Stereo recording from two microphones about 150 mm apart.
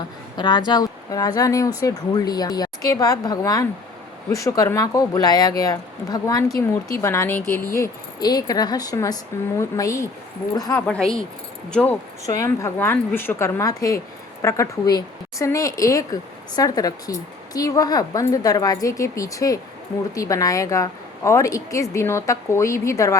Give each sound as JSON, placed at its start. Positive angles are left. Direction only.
{"t": 0.3, "sound": "a woman's voice", "side_deg": 30}
{"t": 7.7, "sound": "a woman's voice", "side_deg": 25}
{"t": 10.8, "sound": "speech", "side_deg": 5}
{"t": 12.2, "sound": "a woman's voice", "side_deg": 20}